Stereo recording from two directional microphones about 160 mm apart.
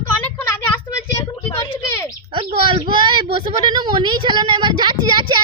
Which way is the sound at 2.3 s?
30° right (ahead or behind).